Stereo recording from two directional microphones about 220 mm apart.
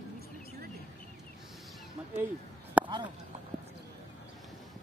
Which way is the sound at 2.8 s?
5° right (ahead or behind).